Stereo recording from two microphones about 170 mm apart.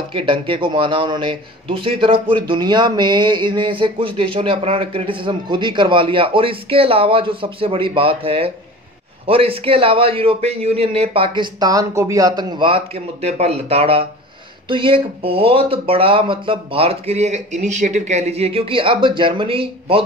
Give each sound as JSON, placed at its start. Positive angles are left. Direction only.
{"t": 0.1, "sound": "a man's voice", "side_deg": -30}